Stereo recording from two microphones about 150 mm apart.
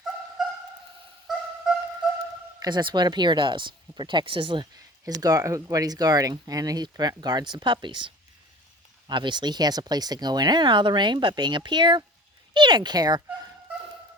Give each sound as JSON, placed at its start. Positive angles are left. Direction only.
{"t": 0.4, "sound": "sonar", "side_deg": -5}
{"t": 1.3, "sound": "music", "side_deg": 0}
{"t": 2.6, "sound": "speech", "side_deg": -30}